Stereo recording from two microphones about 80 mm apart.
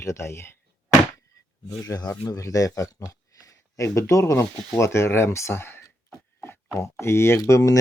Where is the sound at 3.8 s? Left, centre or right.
Left.